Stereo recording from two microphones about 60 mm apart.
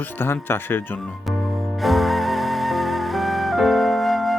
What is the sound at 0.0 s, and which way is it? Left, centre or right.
Speech, left.